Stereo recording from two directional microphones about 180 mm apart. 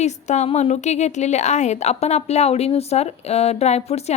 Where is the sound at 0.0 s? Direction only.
40° left (ahead or behind).